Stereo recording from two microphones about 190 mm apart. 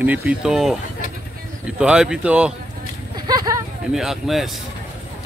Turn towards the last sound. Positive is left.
turn(degrees=0)  # may be behind; listen again after turning